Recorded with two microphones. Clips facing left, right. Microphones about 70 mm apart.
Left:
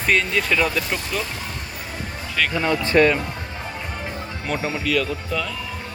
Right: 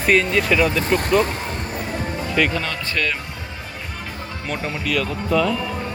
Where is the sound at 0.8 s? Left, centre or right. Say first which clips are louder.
Right 9 dB; right.